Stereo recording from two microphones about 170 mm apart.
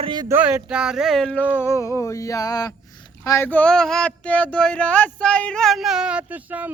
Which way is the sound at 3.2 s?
15° left (ahead or behind).